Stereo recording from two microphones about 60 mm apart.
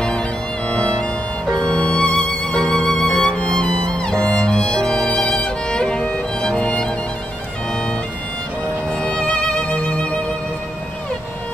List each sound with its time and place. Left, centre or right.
0.0 s music: centre
6.6 s music: centre
8.9 s music: centre
9.3 s music: centre